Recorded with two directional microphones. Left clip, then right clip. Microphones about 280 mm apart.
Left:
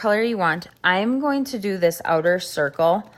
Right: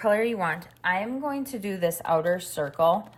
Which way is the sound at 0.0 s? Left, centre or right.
Centre.